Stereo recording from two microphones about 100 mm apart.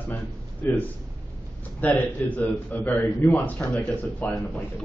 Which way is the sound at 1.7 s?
15° left (ahead or behind).